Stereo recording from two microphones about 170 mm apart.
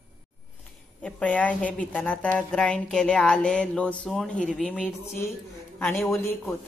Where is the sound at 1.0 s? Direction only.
5° left (ahead or behind).